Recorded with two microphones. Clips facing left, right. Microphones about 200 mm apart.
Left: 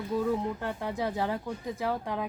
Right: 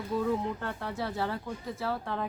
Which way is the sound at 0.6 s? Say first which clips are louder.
Left 3 dB; 15° left (ahead or behind).